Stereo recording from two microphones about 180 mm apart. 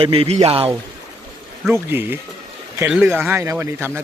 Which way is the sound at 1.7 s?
10° right (ahead or behind).